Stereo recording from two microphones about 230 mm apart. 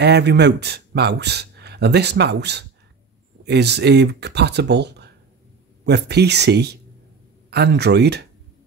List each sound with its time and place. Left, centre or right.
0.0 s a man's voice: right